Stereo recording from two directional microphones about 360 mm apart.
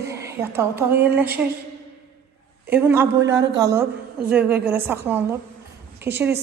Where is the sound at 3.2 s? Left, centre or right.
Right.